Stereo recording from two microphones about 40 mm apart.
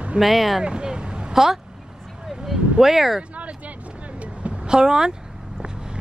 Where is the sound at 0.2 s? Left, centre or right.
Centre.